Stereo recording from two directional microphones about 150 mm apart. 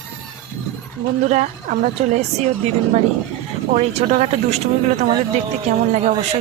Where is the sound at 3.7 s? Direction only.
45° right (ahead or behind).